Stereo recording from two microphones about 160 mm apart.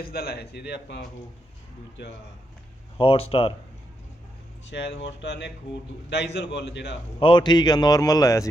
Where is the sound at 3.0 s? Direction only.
35° left (ahead or behind).